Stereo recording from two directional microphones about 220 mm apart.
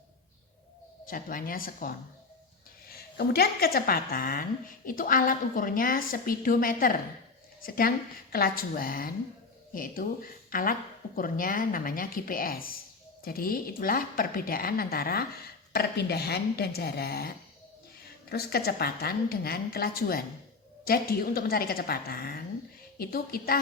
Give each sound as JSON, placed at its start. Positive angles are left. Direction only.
{"t": 1.0, "sound": "a woman's voice", "side_deg": 40}